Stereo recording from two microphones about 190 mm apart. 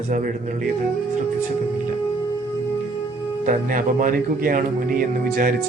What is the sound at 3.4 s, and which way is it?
A man's voice, 45° right (ahead or behind).